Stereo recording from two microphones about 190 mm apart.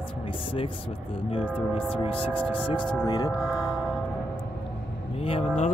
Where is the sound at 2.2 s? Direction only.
30° left (ahead or behind).